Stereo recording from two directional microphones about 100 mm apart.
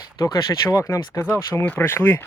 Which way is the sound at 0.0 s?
40° left (ahead or behind).